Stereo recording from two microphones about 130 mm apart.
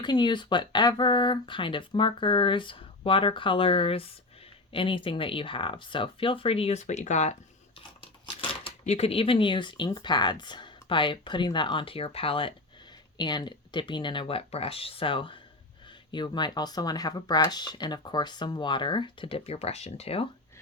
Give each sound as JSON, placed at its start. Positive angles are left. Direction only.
{"t": 0.0, "sound": "speech", "side_deg": 35}
{"t": 8.0, "sound": "a sound", "side_deg": 45}
{"t": 8.8, "sound": "speech", "side_deg": 55}